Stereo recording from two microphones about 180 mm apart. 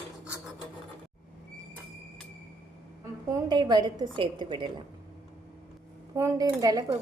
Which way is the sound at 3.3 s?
25° right (ahead or behind).